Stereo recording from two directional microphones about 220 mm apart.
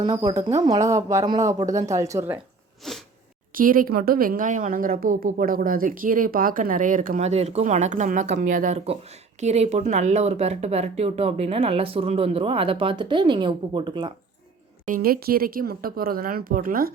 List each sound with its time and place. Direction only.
0.0 s speech: 20° right (ahead or behind)
2.8 s sneeze: centre (ahead or behind)
3.5 s speech: 40° right (ahead or behind); by 14.1 s 20° right (ahead or behind)
14.8 s speech: 40° right (ahead or behind)